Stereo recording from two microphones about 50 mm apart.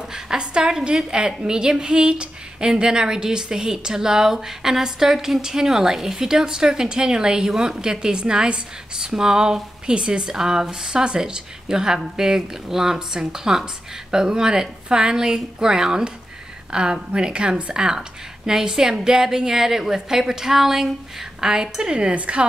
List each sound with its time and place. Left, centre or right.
0.1 s a woman's voice: centre